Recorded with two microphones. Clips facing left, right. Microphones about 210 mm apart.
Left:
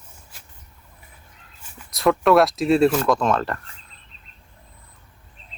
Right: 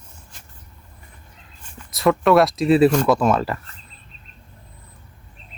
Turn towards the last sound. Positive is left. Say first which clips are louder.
# right 3 dB
turn(degrees=-5)  # may be behind; listen again after turning